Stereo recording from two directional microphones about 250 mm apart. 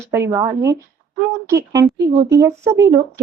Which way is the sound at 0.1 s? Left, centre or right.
Centre.